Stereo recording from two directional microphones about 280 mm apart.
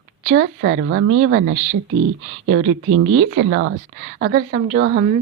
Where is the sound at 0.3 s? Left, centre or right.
Right.